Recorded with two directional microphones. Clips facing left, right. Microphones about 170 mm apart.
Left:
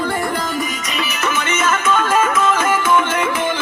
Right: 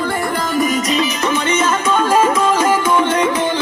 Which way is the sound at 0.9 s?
30° right (ahead or behind).